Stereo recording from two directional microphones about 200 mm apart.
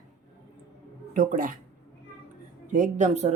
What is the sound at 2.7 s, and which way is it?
Speech, 40° right (ahead or behind).